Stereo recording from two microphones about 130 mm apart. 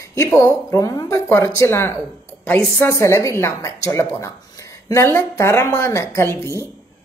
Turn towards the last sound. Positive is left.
turn(degrees=20)  # may be behind; listen again after turning